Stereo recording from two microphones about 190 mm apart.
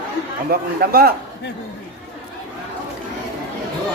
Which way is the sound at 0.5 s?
55° right (ahead or behind).